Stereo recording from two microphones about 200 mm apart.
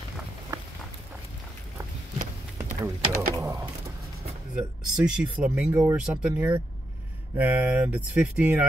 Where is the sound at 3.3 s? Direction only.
15° right (ahead or behind).